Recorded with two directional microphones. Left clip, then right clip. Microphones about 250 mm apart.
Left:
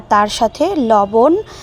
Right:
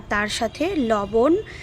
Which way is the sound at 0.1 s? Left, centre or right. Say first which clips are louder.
Left 10 dB; centre.